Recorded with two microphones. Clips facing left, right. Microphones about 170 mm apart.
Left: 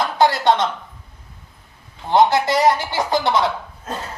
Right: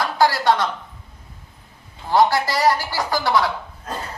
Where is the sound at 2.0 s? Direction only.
20° left (ahead or behind).